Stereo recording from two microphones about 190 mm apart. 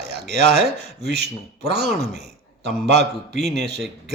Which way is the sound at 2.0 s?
60° right (ahead or behind).